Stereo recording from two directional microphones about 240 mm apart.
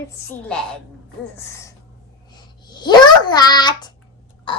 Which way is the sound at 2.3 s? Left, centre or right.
Centre.